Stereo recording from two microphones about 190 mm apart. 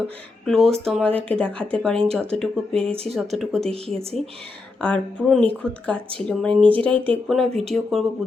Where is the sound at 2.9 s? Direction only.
30° right (ahead or behind).